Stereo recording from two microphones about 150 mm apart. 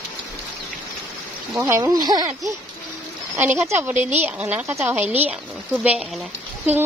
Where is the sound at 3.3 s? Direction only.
15° right (ahead or behind).